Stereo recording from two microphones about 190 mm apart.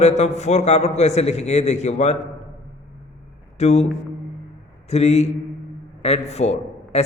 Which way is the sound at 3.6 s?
35° left (ahead or behind).